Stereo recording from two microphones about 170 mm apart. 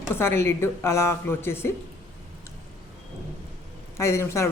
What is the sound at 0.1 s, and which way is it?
Speech, 15° left (ahead or behind).